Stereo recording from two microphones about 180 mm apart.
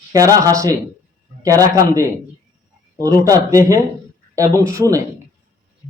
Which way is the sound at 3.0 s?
20° right (ahead or behind).